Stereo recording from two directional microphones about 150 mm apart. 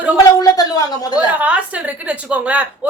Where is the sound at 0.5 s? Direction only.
25° left (ahead or behind).